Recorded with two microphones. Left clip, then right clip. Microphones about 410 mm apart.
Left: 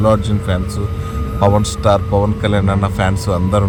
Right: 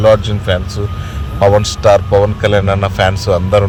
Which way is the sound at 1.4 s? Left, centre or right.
Right.